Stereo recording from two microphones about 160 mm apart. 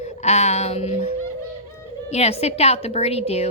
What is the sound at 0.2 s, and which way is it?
A woman's voice, 45° left (ahead or behind).